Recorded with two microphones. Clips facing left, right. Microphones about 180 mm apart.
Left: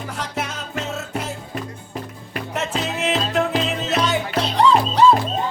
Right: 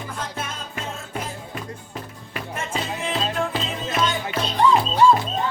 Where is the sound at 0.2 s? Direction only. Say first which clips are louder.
Left 5 dB; 80° left.